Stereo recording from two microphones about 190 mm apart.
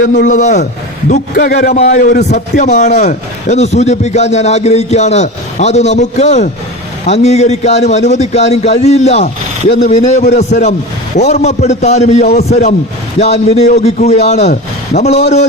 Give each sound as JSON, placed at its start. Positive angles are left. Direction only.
{"t": 0.3, "sound": "a man's voice", "side_deg": 40}
{"t": 1.7, "sound": "a man's voice", "side_deg": 40}